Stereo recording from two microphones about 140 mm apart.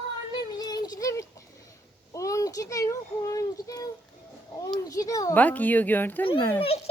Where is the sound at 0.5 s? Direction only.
30° left (ahead or behind).